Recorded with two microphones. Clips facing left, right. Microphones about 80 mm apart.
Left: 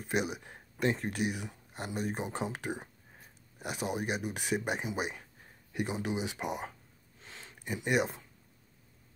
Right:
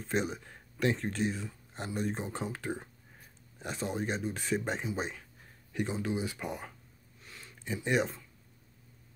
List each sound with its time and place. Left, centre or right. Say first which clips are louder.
0.1 s speech: even; centre
7.2 s a sound: left 1 dB; left
7.5 s speech: even; centre